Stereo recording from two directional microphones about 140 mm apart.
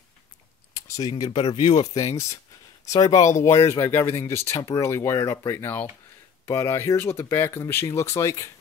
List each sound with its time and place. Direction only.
0.7 s speech: 25° left (ahead or behind)
2.0 s speech: 25° left (ahead or behind)